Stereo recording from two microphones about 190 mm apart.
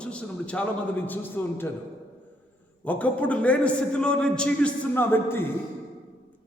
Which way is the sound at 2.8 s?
10° left (ahead or behind).